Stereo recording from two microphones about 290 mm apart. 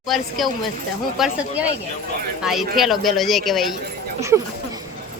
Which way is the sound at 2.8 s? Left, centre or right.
Centre.